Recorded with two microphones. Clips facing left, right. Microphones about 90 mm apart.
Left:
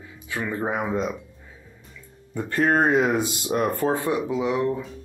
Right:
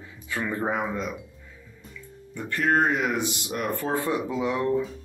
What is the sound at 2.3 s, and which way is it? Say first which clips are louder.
Speech: left 3 dB; 30° left (ahead or behind).